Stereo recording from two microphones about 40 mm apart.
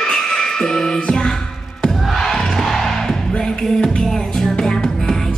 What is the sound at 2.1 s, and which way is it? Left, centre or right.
Music, centre.